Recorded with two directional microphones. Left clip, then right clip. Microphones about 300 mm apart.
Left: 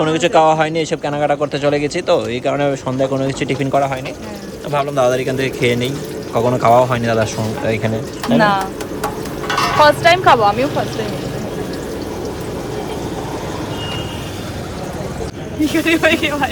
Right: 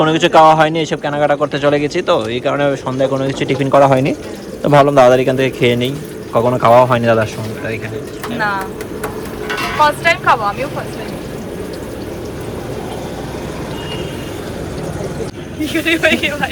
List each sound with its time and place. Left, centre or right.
0.0 s a man's voice: centre
8.4 s speech: left
9.8 s speech: left
15.6 s speech: left